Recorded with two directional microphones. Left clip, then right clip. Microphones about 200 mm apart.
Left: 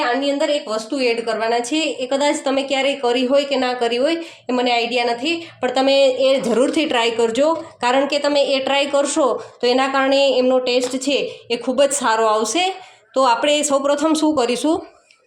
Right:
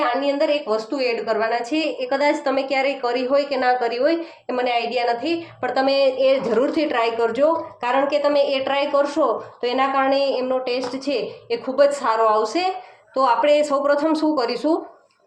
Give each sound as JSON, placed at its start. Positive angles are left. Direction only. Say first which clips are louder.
{"t": 0.3, "sound": "a woman's voice", "louder": "even", "side_deg": 35}